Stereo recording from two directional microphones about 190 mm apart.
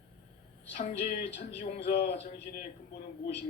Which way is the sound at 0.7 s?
35° left (ahead or behind).